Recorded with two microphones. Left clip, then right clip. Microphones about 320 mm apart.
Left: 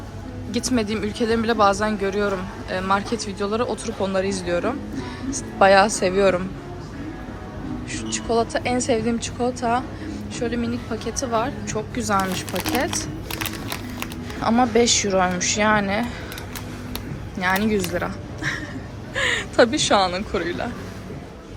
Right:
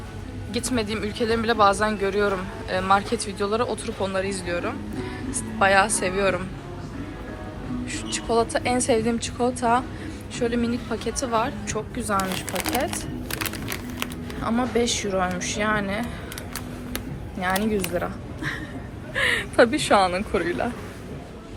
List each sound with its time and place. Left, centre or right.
0.5 s speech: centre
7.9 s speech: centre
14.0 s speech: centre
17.4 s speech: centre